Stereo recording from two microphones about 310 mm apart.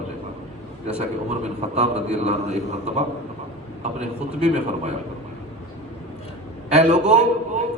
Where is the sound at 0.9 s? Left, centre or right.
Right.